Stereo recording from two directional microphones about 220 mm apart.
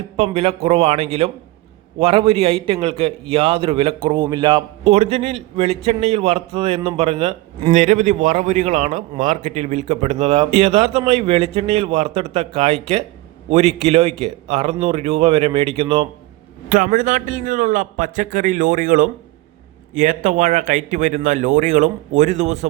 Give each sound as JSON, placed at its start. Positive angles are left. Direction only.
{"t": 0.2, "sound": "a man's voice", "side_deg": -25}